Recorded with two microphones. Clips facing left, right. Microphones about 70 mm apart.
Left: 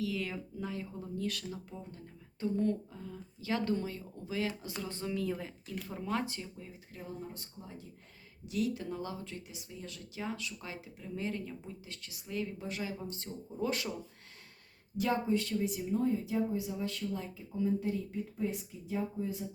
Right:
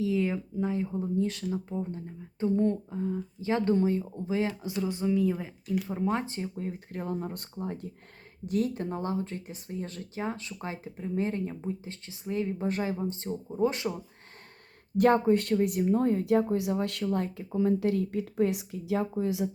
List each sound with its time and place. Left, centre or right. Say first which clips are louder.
0.0 s speech: right 8 dB; right
4.8 s speech: right 10 dB; centre; by 6.5 s right
6.6 s speech: right 12 dB; right
8.4 s speech: right 5 dB; right
14.9 s speech: right 9 dB; right